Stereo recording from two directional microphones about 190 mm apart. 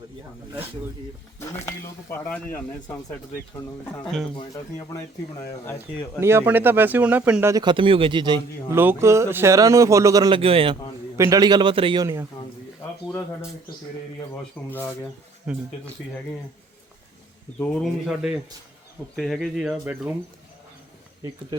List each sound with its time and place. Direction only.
1.4 s speech: 15° left (ahead or behind)
6.1 s speech: 15° right (ahead or behind)
7.5 s a man's voice: 25° right (ahead or behind)
8.7 s a man's voice: 10° right (ahead or behind)
14.7 s speech: 10° left (ahead or behind)
15.5 s speech: 5° right (ahead or behind)
17.6 s speech: 5° left (ahead or behind)